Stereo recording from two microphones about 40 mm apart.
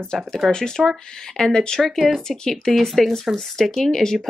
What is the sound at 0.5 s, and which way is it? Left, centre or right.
Speech, centre.